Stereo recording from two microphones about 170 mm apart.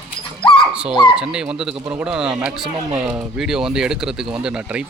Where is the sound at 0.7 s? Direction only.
5° right (ahead or behind).